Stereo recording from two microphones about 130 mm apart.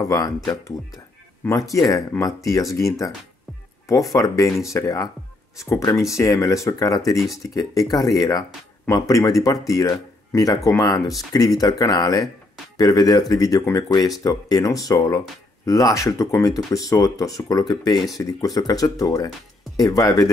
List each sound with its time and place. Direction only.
0.0 s speech: 30° left (ahead or behind)